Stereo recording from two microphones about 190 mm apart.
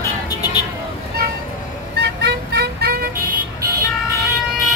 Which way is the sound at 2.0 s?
65° right (ahead or behind).